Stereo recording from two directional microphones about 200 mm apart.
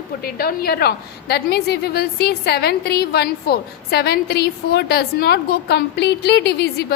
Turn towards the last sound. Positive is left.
turn(degrees=55)  # may be behind; listen again after turning